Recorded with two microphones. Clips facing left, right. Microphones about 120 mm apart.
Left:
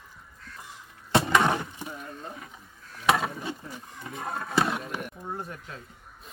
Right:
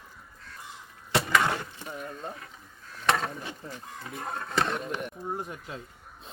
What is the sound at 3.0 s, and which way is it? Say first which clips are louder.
Speech: left 2 dB; 10° left (ahead or behind).